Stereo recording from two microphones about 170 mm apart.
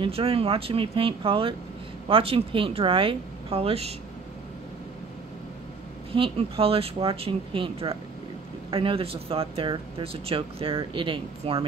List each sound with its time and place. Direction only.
0.0 s speech: 35° right (ahead or behind)
6.1 s speech: 35° right (ahead or behind)